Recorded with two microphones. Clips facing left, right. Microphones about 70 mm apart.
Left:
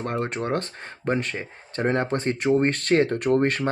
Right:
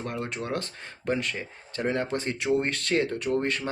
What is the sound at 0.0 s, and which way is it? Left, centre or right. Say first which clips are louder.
Speech: left 6 dB; left.